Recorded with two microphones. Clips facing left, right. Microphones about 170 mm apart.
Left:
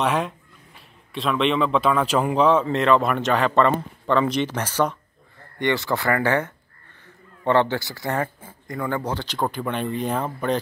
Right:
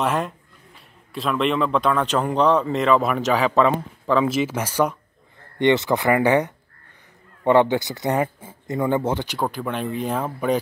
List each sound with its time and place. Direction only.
0.0 s speech: centre (ahead or behind)
5.6 s speech: 20° right (ahead or behind)